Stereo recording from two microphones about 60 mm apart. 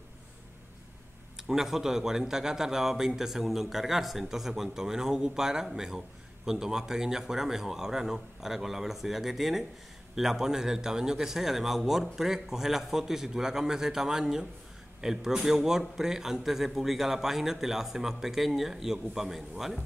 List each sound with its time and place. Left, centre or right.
1.5 s a man's voice: centre